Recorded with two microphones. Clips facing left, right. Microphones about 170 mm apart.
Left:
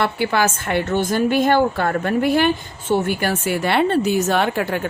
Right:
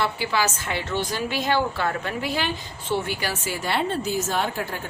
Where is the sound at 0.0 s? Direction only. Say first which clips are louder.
Left 5 dB; 55° left (ahead or behind).